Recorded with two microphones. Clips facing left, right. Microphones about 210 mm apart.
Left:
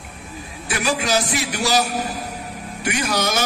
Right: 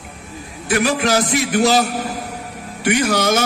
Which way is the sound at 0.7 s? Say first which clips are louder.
Right 5 dB; 55° right (ahead or behind).